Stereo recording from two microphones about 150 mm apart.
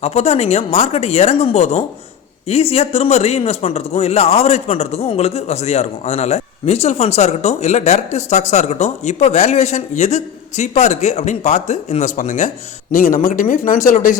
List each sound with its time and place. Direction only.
0.0 s a man's voice: 45° left (ahead or behind); by 14.2 s 65° left (ahead or behind)